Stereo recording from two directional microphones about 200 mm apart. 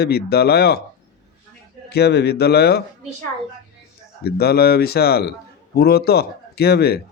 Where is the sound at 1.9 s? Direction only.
55° left (ahead or behind).